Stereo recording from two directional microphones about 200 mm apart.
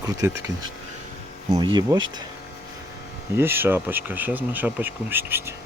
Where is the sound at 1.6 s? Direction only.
20° right (ahead or behind).